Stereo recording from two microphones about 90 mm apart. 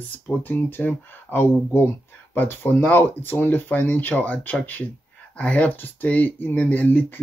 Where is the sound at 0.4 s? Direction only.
20° left (ahead or behind).